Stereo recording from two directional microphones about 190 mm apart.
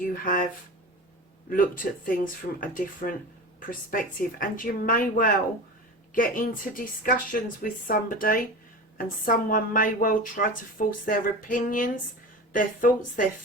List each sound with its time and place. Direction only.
0.0 s a woman's voice: 45° left (ahead or behind)
1.5 s a woman's voice: 45° left (ahead or behind)